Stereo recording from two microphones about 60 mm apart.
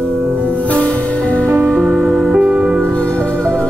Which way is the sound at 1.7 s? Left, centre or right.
Centre.